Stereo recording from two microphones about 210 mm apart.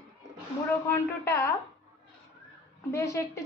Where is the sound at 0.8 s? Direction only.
15° left (ahead or behind).